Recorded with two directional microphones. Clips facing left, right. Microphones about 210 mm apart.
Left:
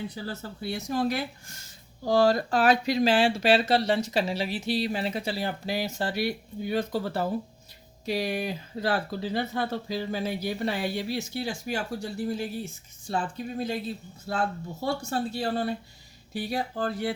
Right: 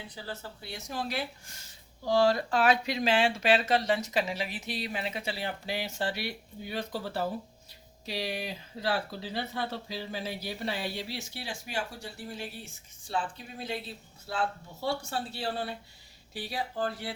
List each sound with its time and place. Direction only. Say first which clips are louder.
0.2 s speech: left 6 dB; 45° left (ahead or behind)